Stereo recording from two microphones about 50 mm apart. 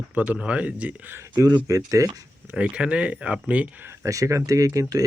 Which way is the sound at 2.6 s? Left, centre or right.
Right.